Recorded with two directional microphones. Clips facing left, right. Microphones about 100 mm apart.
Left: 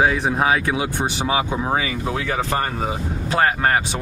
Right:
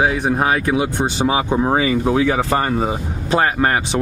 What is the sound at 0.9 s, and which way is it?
Speech, 25° right (ahead or behind).